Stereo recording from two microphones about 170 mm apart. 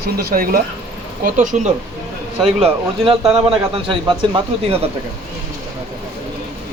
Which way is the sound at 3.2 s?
30° right (ahead or behind).